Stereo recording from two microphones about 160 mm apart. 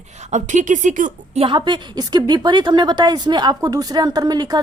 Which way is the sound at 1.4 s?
30° right (ahead or behind).